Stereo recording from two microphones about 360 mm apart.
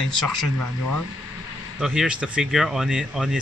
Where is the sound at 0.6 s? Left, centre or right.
Left.